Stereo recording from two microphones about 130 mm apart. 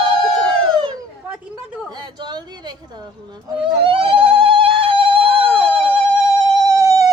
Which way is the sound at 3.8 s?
45° right (ahead or behind).